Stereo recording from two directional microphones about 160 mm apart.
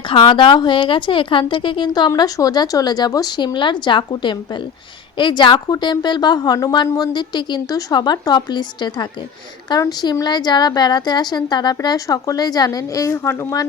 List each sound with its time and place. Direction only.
0.1 s speech: 30° left (ahead or behind)